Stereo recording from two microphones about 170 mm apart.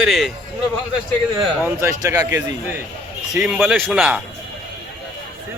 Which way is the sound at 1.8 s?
15° right (ahead or behind).